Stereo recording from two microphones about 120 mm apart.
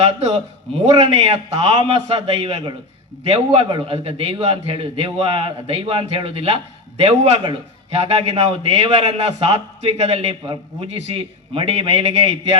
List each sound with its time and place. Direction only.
0.0 s a man's voice: 65° right (ahead or behind)